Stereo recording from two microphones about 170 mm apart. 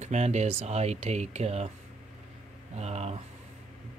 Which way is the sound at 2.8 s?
40° right (ahead or behind).